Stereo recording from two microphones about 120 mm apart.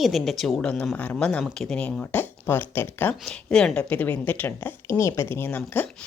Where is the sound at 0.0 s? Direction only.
Centre (ahead or behind); by 3.2 s 15° left (ahead or behind).